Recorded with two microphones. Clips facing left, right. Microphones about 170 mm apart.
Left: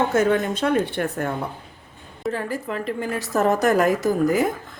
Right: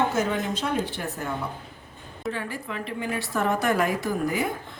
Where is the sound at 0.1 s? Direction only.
55° left (ahead or behind).